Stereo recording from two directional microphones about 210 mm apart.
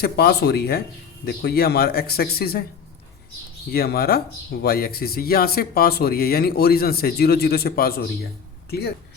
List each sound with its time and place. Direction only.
0.0 s speech: 50° left (ahead or behind)
3.7 s speech: 45° left (ahead or behind)